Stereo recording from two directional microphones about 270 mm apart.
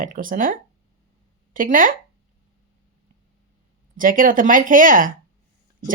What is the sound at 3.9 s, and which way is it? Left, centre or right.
A woman's voice, right.